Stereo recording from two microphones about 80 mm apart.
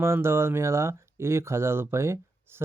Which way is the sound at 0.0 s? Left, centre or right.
Right.